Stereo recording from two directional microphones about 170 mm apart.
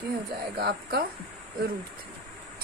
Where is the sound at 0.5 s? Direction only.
70° right (ahead or behind).